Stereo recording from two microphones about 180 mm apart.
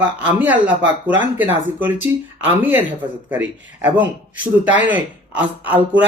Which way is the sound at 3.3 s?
10° right (ahead or behind).